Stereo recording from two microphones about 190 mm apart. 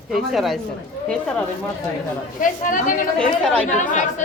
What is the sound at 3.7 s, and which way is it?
Speech, 40° left (ahead or behind).